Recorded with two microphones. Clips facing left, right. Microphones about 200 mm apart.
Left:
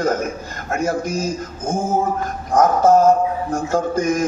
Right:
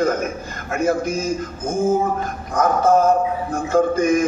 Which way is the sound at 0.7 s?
55° right (ahead or behind).